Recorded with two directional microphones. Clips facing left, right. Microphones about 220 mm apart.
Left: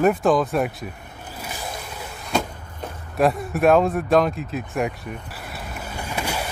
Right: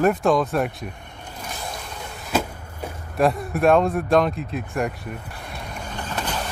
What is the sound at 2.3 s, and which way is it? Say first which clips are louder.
Vehicle: right 1 dB; 5° right (ahead or behind).